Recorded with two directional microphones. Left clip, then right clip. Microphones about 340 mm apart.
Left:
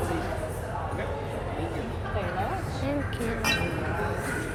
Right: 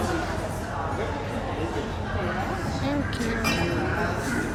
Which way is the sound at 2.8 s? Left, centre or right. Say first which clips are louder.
Right 2 dB; centre.